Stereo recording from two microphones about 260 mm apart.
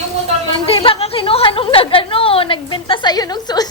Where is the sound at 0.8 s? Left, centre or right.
Left.